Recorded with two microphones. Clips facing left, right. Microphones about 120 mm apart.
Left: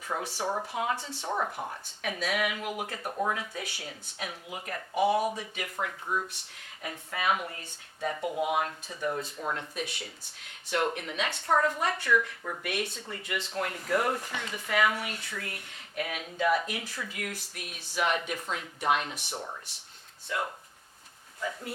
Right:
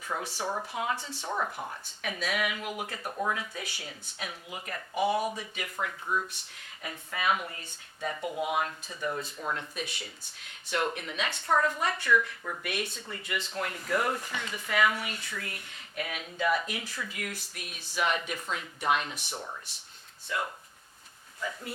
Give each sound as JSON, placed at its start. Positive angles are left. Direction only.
{"t": 0.1, "sound": "speech", "side_deg": 30}
{"t": 0.7, "sound": "speech", "side_deg": 45}
{"t": 0.9, "sound": "speech", "side_deg": 30}
{"t": 2.0, "sound": "speech", "side_deg": 45}
{"t": 3.1, "sound": "speech", "side_deg": 25}
{"t": 3.3, "sound": "speech", "side_deg": 45}
{"t": 5.7, "sound": "speech", "side_deg": 30}
{"t": 6.8, "sound": "speech", "side_deg": 45}
{"t": 9.7, "sound": "speech", "side_deg": 50}
{"t": 10.8, "sound": "speech", "side_deg": 40}
{"t": 11.5, "sound": "speech", "side_deg": 40}
{"t": 13.0, "sound": "speech", "side_deg": 40}
{"t": 19.3, "sound": "speech", "side_deg": 25}
{"t": 20.3, "sound": "speech", "side_deg": 45}